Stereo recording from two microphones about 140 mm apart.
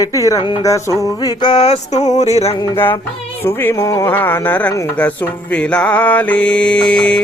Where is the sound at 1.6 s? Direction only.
50° left (ahead or behind).